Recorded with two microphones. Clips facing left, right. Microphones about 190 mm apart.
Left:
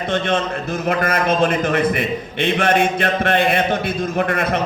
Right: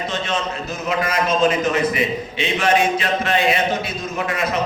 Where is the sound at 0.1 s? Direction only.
55° left (ahead or behind).